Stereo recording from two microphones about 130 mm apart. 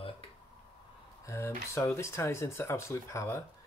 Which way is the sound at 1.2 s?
20° left (ahead or behind).